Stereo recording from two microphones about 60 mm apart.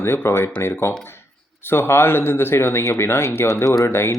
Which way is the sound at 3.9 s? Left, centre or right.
Left.